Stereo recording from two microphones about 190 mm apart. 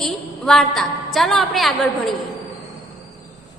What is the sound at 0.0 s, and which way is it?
A woman's voice, centre (ahead or behind).